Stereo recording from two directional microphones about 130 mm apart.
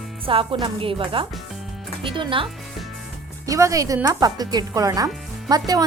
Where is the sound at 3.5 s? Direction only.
25° right (ahead or behind).